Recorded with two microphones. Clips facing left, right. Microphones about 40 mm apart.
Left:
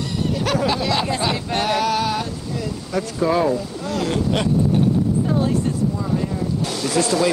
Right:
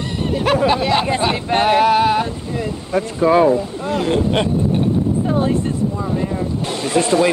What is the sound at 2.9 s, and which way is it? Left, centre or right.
Speech, right.